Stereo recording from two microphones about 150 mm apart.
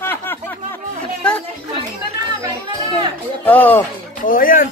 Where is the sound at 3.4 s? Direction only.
10° left (ahead or behind).